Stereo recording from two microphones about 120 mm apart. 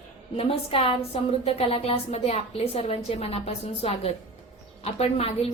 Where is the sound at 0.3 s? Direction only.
55° left (ahead or behind).